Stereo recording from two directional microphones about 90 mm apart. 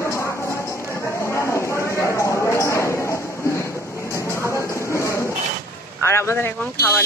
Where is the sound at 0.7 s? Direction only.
20° left (ahead or behind).